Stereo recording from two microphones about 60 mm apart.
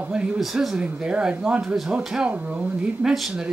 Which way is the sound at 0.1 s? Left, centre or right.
Centre.